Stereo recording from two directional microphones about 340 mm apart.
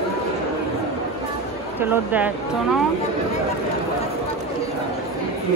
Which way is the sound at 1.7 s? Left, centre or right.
Centre.